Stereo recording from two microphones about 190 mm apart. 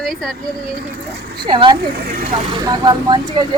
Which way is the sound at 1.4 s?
25° right (ahead or behind).